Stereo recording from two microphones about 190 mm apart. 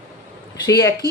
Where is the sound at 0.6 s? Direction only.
20° left (ahead or behind).